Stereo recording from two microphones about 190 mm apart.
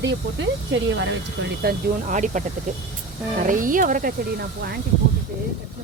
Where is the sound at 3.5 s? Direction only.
45° right (ahead or behind).